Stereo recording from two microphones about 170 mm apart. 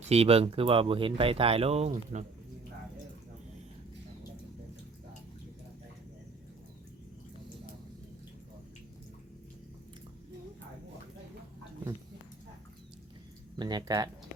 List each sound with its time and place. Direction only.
0.1 s speech: 35° right (ahead or behind)
13.6 s speech: 25° right (ahead or behind)